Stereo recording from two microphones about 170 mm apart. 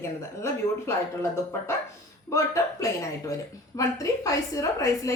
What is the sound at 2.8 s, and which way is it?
A woman's voice, 20° left (ahead or behind).